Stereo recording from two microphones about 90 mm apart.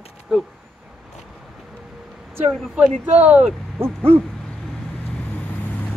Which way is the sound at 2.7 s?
15° right (ahead or behind).